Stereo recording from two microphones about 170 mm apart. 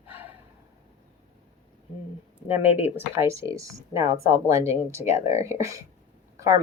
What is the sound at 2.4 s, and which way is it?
Speech, 10° right (ahead or behind).